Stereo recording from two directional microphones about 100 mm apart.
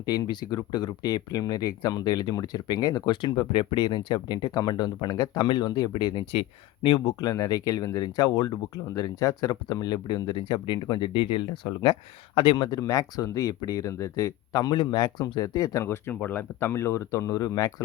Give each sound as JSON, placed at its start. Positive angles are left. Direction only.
{"t": 0.0, "sound": "speech", "side_deg": 40}
{"t": 15.8, "sound": "speech", "side_deg": 25}